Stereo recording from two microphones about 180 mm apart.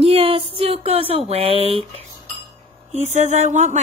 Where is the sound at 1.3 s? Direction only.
30° right (ahead or behind).